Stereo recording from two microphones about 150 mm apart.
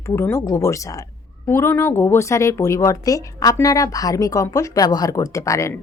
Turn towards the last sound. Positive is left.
turn(degrees=20)  # may be behind; listen again after turning